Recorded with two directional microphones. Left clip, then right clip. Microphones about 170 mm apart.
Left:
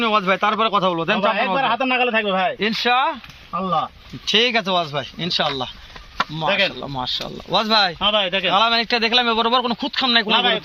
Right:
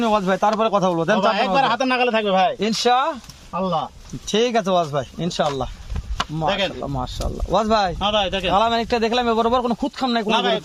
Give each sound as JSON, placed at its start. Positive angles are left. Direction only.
{"t": 0.0, "sound": "speech", "side_deg": -70}
{"t": 1.5, "sound": "a man's voice", "side_deg": -15}
{"t": 2.6, "sound": "speech", "side_deg": -85}
{"t": 4.3, "sound": "speech", "side_deg": -70}
{"t": 6.4, "sound": "speech", "side_deg": -50}
{"t": 6.7, "sound": "a man's voice", "side_deg": -25}
{"t": 7.5, "sound": "speech", "side_deg": -70}
{"t": 7.9, "sound": "speech", "side_deg": -50}
{"t": 8.5, "sound": "a man's voice", "side_deg": -70}